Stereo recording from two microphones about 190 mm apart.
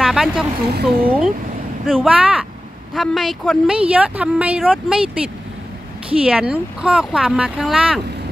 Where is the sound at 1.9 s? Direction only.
Centre (ahead or behind).